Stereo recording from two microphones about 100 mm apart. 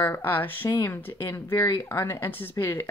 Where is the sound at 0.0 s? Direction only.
20° left (ahead or behind).